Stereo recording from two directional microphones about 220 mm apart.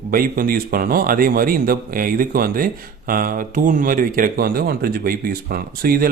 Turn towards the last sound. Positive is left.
turn(degrees=-40)  # may be behind; listen again after turning